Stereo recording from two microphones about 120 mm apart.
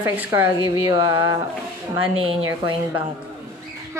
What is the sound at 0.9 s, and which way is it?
Speech, 30° right (ahead or behind).